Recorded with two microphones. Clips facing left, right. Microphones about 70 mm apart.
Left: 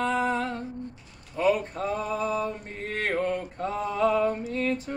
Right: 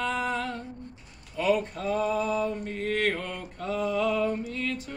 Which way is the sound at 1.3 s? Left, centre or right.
Left.